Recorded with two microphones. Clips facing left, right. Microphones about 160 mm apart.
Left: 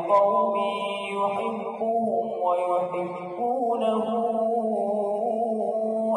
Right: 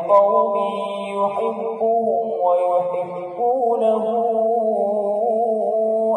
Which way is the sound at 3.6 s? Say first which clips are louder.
Right 6 dB; 30° right (ahead or behind).